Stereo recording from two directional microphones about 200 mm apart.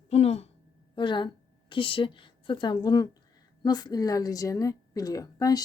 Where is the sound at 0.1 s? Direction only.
30° left (ahead or behind).